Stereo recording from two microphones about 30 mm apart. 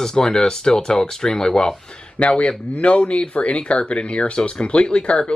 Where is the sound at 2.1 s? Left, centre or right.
Left.